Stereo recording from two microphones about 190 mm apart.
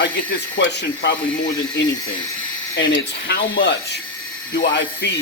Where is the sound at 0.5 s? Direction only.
65° left (ahead or behind).